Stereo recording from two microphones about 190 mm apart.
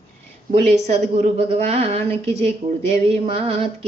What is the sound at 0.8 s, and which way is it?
Child singing, 40° right (ahead or behind).